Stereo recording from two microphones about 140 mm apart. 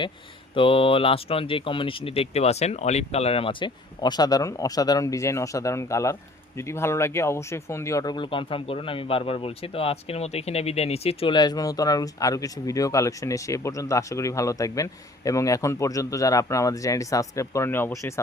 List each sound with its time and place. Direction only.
0.5 s speech: 40° left (ahead or behind)
11.3 s speech: 30° left (ahead or behind)